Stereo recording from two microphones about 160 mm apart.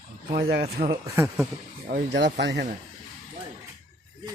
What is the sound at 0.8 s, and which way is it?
Speech, 50° right (ahead or behind).